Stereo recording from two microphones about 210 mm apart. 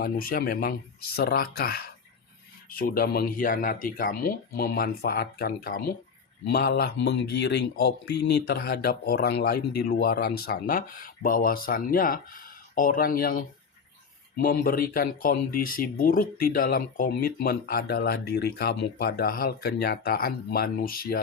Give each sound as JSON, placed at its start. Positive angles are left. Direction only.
{"t": 0.0, "sound": "speech", "side_deg": 45}